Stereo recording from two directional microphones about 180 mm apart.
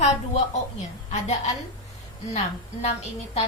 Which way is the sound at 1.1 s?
40° left (ahead or behind).